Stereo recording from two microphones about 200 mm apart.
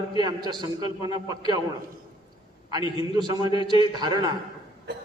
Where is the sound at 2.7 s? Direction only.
20° right (ahead or behind).